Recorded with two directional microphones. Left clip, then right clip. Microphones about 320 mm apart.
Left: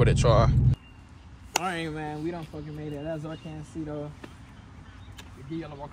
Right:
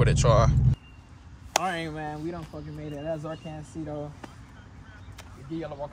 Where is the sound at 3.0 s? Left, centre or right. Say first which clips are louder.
Right 4 dB; right.